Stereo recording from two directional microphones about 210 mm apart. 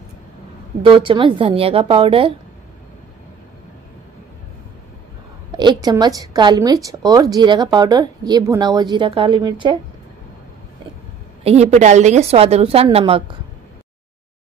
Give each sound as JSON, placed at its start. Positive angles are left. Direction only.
{"t": 0.8, "sound": "speech", "side_deg": -25}
{"t": 5.6, "sound": "speech", "side_deg": -20}
{"t": 11.4, "sound": "speech", "side_deg": -30}